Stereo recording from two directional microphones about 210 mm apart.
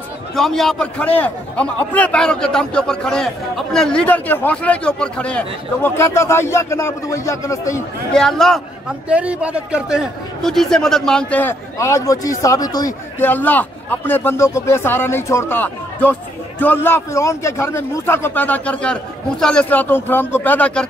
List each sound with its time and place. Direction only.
0.4 s a man's voice: centre (ahead or behind)
8.1 s a man's voice: centre (ahead or behind)